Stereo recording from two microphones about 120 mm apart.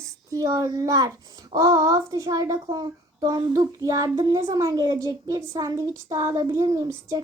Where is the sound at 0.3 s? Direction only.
30° right (ahead or behind).